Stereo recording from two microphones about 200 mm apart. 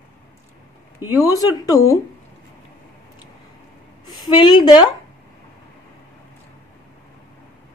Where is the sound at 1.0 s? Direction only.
10° right (ahead or behind).